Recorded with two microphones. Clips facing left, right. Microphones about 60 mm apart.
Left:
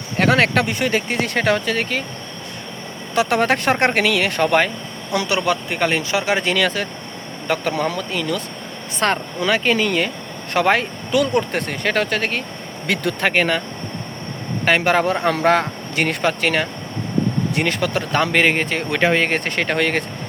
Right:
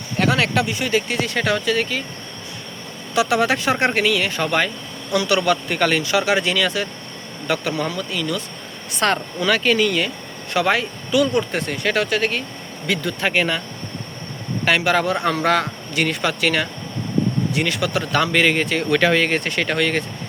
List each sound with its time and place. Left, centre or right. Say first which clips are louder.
0.2 s speech: left 3 dB; left
3.2 s speech: left 1 dB; left
5.1 s speech: right 1 dB; left
6.5 s speech: left 1 dB; left
12.9 s speech: left 2 dB; left
14.6 s speech: left 2 dB; left